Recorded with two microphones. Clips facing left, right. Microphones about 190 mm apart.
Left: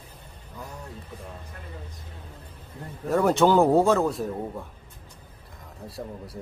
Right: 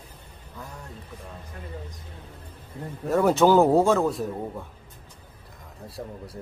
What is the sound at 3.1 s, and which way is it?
Speech, centre (ahead or behind).